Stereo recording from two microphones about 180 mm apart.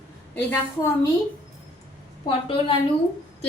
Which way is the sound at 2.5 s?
30° left (ahead or behind).